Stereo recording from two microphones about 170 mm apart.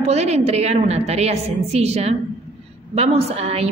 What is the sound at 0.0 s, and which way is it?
A woman's voice, 40° right (ahead or behind).